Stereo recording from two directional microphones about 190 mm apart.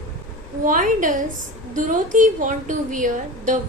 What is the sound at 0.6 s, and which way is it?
Speech, 45° right (ahead or behind).